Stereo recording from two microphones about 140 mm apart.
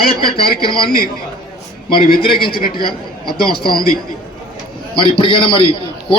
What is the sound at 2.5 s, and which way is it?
Speech, 90° left.